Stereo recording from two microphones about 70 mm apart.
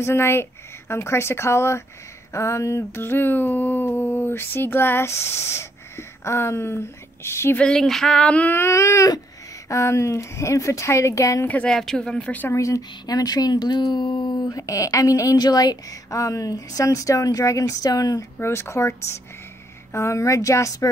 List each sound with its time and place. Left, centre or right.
0.0 s a sound: left
7.5 s female singing: centre
8.5 s speech: left
11.4 s speech: left
11.7 s female singing: centre
12.2 s speech: left
12.4 s speech: left
13.0 s speech: left
15.3 s a woman's voice: left
18.4 s a sound: left
19.9 s speech: left